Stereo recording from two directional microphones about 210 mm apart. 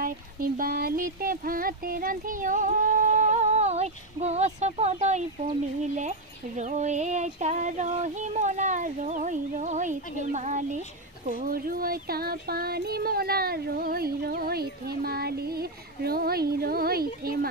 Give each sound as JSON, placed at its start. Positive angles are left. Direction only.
{"t": 0.0, "sound": "speech", "side_deg": -45}
{"t": 5.8, "sound": "a sound", "side_deg": -35}
{"t": 11.2, "sound": "child singing", "side_deg": -40}